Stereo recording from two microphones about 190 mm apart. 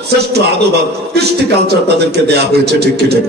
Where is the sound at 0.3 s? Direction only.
60° right (ahead or behind).